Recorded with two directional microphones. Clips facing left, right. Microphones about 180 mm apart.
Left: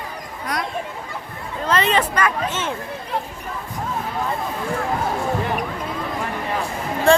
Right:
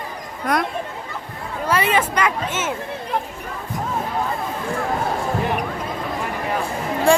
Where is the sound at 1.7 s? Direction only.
10° right (ahead or behind).